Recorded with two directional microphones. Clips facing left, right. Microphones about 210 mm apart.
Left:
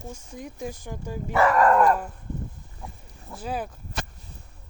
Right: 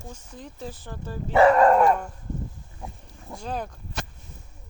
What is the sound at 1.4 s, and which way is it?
Speech, 25° right (ahead or behind).